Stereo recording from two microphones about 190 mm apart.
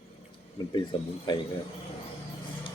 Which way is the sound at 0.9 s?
25° left (ahead or behind).